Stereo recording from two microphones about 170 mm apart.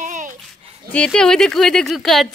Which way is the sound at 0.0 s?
50° right (ahead or behind).